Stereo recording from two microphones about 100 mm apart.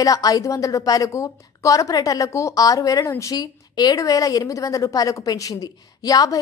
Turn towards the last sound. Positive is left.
turn(degrees=40)  # may be behind; listen again after turning